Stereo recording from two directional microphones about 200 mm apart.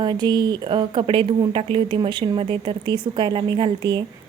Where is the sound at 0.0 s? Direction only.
20° right (ahead or behind).